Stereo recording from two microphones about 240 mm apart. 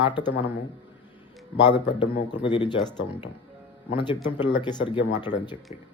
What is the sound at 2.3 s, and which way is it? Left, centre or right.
Speech, centre.